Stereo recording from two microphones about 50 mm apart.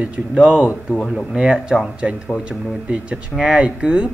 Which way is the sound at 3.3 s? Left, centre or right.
Centre.